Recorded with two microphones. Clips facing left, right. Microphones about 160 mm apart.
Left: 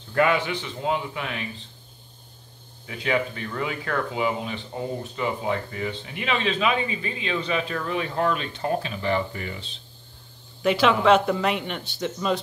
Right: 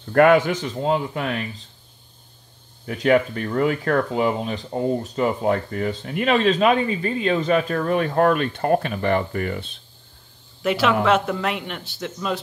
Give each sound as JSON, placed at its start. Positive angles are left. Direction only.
{"t": 0.1, "sound": "speech", "side_deg": -55}
{"t": 2.9, "sound": "speech", "side_deg": -50}
{"t": 10.6, "sound": "a man's voice", "side_deg": 0}